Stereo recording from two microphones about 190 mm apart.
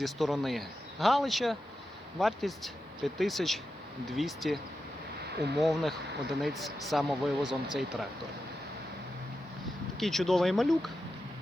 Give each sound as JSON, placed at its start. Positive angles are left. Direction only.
{"t": 0.0, "sound": "speech", "side_deg": 0}
{"t": 10.0, "sound": "speech", "side_deg": 0}